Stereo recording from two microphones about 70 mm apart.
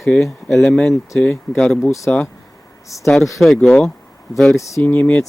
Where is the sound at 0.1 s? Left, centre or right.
Centre.